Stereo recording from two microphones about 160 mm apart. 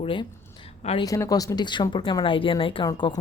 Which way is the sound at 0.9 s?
20° left (ahead or behind).